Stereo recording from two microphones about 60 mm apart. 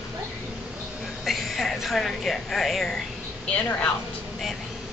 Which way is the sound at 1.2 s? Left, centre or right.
Centre.